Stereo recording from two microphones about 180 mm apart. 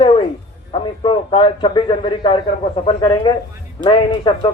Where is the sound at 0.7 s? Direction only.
25° left (ahead or behind).